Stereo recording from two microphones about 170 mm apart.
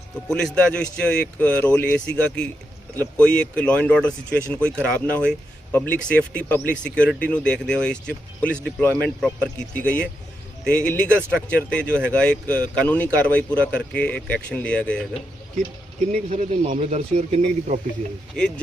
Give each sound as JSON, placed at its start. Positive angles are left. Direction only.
{"t": 0.3, "sound": "speech", "side_deg": 5}
{"t": 11.9, "sound": "speech", "side_deg": -15}
{"t": 12.1, "sound": "speech", "side_deg": 5}
{"t": 16.1, "sound": "speech", "side_deg": -45}
{"t": 18.3, "sound": "speech", "side_deg": 5}